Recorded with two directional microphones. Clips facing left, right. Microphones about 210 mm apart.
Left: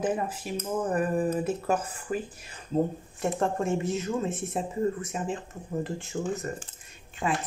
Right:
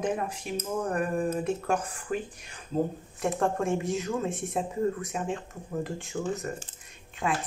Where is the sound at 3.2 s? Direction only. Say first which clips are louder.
Even; centre (ahead or behind).